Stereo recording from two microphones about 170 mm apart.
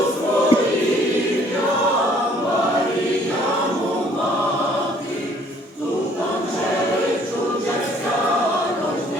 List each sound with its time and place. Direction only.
0.5 s choir: 30° left (ahead or behind)